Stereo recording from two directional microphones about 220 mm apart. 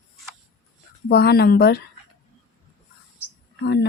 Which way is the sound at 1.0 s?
45° left (ahead or behind).